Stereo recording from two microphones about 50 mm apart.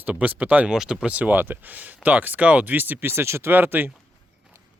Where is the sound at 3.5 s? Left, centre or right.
Right.